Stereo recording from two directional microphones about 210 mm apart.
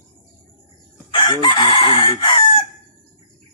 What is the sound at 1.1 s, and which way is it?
Chicken, 20° left (ahead or behind).